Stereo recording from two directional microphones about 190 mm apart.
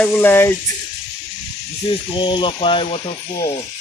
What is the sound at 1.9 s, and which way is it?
Speech, 25° left (ahead or behind).